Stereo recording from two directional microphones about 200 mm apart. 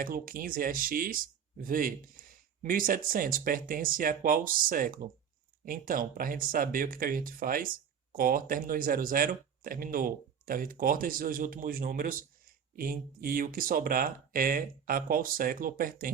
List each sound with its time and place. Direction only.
0.0 s speech: 45° right (ahead or behind)